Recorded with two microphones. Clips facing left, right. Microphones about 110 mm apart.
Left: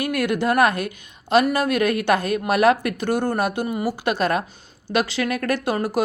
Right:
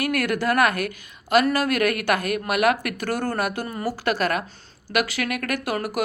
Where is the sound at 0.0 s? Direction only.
20° left (ahead or behind).